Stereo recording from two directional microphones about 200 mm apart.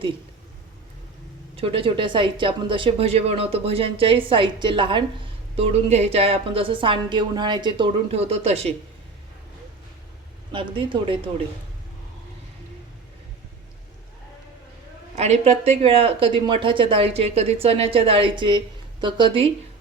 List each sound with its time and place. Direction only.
1.5 s speech: 25° right (ahead or behind)
10.5 s speech: 25° right (ahead or behind)
15.1 s speech: 35° right (ahead or behind)